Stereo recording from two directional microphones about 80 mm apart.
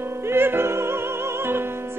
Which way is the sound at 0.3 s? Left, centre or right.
Right.